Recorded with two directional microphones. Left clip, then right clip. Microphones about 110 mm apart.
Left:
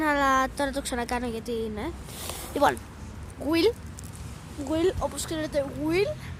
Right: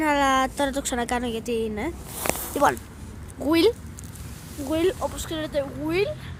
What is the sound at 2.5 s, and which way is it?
Speech, 5° left (ahead or behind).